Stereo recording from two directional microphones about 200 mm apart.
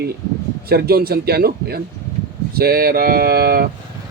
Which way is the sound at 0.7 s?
50° right (ahead or behind).